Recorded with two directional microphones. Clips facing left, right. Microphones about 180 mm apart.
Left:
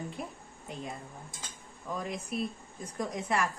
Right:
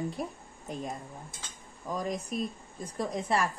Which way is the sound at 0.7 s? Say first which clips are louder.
Right 4 dB; 40° right (ahead or behind).